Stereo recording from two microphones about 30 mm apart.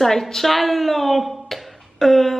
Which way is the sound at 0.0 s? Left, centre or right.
Centre.